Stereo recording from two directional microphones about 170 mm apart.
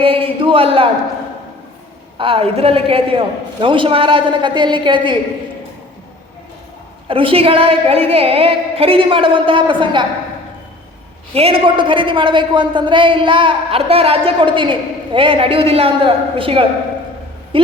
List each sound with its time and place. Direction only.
0.0 s a man's voice: 35° right (ahead or behind)
2.1 s a man's voice: 30° right (ahead or behind)
7.1 s a man's voice: 30° right (ahead or behind)
11.3 s a man's voice: 35° right (ahead or behind)